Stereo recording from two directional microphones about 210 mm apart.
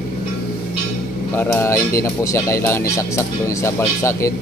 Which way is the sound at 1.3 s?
10° left (ahead or behind).